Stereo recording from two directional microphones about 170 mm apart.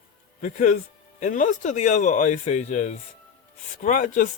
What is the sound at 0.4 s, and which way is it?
Speech, 45° left (ahead or behind).